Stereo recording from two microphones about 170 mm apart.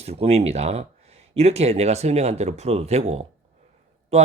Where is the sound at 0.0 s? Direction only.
35° right (ahead or behind).